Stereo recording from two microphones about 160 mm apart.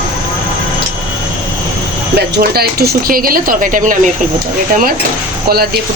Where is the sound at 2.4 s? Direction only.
75° right (ahead or behind); by 4.0 s 55° right (ahead or behind).